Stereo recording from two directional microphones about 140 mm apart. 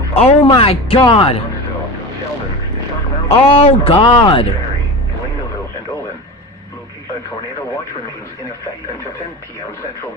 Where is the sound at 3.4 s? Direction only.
45° left (ahead or behind).